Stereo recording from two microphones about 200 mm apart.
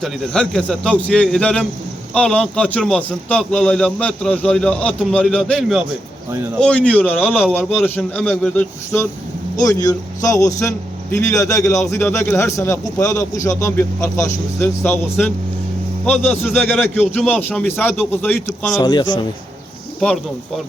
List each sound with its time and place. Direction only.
0.0 s a man's voice: centre (ahead or behind)
7.9 s a man's voice: 10° left (ahead or behind)
18.8 s a man's voice: 20° left (ahead or behind)